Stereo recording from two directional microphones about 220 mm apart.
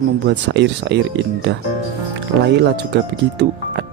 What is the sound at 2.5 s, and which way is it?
Speech, 50° right (ahead or behind).